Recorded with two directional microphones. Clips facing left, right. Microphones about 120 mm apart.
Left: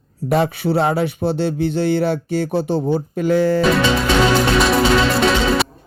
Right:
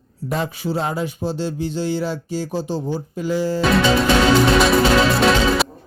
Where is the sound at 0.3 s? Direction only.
65° left (ahead or behind).